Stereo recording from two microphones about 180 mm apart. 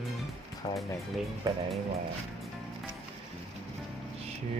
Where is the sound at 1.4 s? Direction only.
20° right (ahead or behind).